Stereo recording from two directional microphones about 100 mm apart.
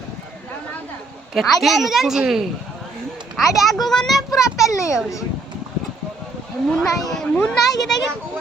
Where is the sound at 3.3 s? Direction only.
Centre (ahead or behind).